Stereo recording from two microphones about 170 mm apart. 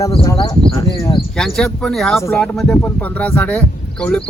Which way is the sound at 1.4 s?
Centre (ahead or behind).